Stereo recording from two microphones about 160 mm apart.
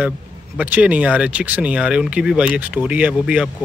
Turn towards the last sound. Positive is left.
turn(degrees=-5)  # may be behind; listen again after turning